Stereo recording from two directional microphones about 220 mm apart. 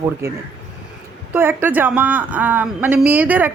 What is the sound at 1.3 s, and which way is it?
A woman's voice, 10° right (ahead or behind).